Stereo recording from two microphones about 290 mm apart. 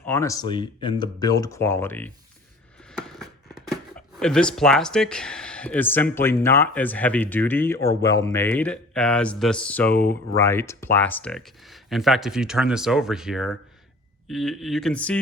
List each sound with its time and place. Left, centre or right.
0.0 s speech: centre
9.9 s speech: left
10.3 s speech: centre